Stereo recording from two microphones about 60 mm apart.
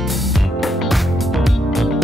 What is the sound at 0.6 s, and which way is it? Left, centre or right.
Music, centre.